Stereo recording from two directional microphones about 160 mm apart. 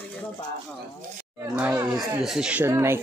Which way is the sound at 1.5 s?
10° right (ahead or behind).